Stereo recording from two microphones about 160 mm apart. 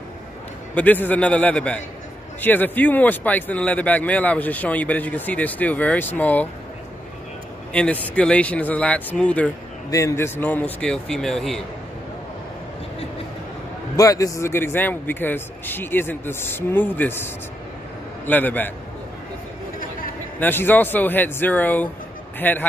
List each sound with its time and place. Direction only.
0.7 s speech: 10° left (ahead or behind)
7.7 s speech: 10° left (ahead or behind)
9.8 s speech: 20° left (ahead or behind); by 11.6 s 5° left (ahead or behind)
13.9 s speech: 20° left (ahead or behind)
20.3 s speech: 10° left (ahead or behind)